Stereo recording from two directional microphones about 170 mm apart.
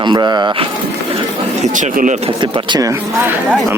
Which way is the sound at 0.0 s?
25° right (ahead or behind).